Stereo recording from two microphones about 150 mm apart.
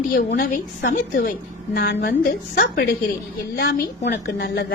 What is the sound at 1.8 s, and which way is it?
A woman's voice, 90° left.